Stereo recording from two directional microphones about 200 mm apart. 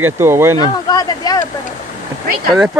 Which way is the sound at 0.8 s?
20° left (ahead or behind).